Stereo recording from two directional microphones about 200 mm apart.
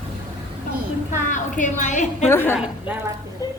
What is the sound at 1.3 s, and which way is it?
Speech, 40° left (ahead or behind).